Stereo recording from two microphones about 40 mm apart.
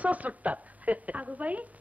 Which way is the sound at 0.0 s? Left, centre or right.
Right.